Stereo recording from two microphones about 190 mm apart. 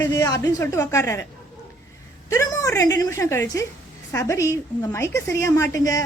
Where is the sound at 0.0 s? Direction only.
20° left (ahead or behind).